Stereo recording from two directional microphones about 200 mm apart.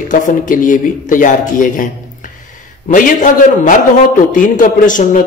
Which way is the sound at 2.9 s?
40° left (ahead or behind).